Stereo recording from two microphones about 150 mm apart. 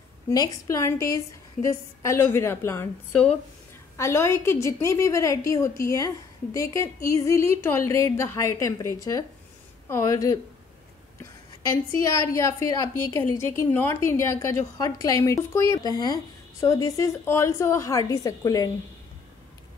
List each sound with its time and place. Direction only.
0.3 s a woman's voice: 25° left (ahead or behind)
11.6 s a woman's voice: 20° left (ahead or behind)